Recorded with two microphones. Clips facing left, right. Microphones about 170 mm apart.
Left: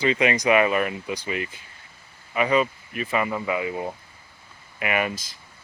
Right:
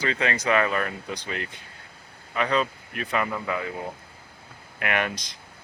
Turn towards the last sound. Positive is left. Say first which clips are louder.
# left 2 dB
turn(degrees=5)  # may be behind; listen again after turning